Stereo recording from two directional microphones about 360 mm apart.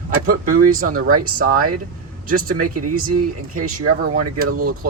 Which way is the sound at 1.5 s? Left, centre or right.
Right.